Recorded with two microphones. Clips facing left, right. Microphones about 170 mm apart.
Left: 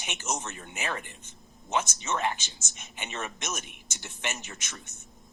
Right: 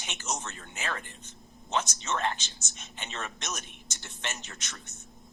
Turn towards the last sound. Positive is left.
turn(degrees=15)  # may be behind; listen again after turning